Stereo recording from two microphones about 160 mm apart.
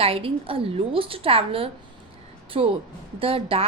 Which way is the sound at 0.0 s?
35° right (ahead or behind).